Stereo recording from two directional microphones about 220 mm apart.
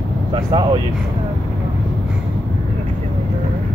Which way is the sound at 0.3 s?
20° right (ahead or behind).